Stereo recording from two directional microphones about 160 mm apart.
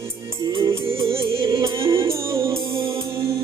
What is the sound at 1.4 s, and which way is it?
Music, 20° right (ahead or behind).